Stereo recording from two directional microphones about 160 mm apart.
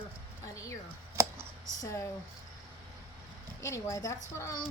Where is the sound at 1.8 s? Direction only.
20° left (ahead or behind).